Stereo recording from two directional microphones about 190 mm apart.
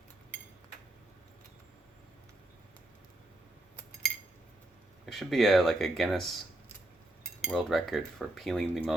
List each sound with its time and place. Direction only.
5.0 s cutlery: centre (ahead or behind)
7.4 s cutlery: centre (ahead or behind)